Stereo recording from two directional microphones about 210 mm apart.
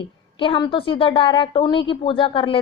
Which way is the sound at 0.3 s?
25° left (ahead or behind).